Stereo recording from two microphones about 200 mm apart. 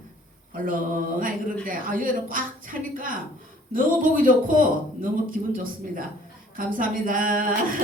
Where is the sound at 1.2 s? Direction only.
45° right (ahead or behind).